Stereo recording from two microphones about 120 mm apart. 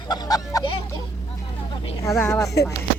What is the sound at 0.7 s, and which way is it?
Speech, 45° left (ahead or behind).